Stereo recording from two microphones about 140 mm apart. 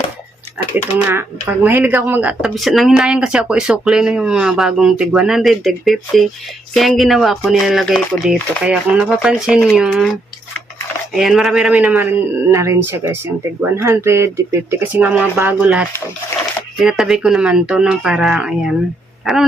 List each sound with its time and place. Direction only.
0.9 s speech: 10° right (ahead or behind)
2.4 s speech: centre (ahead or behind)
11.1 s speech: centre (ahead or behind)